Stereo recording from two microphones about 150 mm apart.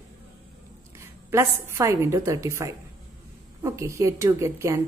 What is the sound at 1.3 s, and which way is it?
A woman's voice, 15° right (ahead or behind).